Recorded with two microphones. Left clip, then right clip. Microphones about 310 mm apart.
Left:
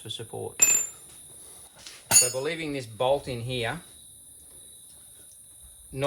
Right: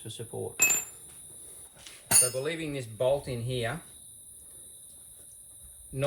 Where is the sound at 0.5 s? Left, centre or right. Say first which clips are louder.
Left 2 dB; centre.